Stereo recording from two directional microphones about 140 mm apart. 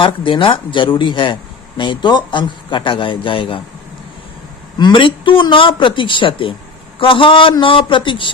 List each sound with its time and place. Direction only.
0.3 s a man's voice: 35° left (ahead or behind)
4.8 s a man's voice: 35° left (ahead or behind)